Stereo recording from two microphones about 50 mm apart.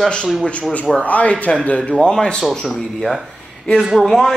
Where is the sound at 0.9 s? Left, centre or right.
Left.